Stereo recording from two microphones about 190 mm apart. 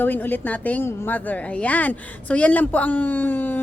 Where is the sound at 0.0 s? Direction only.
10° left (ahead or behind).